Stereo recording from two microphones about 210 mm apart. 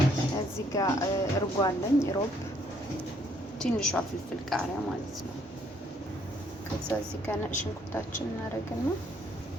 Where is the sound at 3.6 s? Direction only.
5° left (ahead or behind).